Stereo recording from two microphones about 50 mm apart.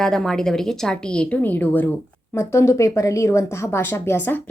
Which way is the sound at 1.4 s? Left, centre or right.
Left.